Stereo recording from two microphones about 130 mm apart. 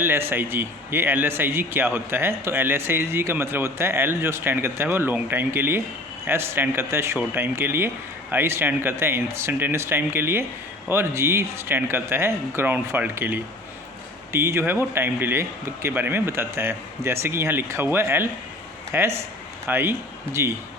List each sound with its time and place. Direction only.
0.0 s a man's voice: 15° right (ahead or behind)